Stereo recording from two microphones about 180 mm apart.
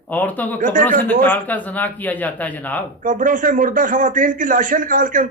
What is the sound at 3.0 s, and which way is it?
A man's voice, 45° right (ahead or behind).